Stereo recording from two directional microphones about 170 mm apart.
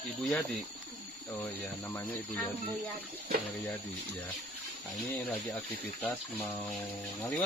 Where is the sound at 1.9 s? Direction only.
10° left (ahead or behind).